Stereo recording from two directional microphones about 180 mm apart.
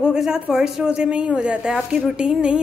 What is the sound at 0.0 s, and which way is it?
Speech, 5° right (ahead or behind).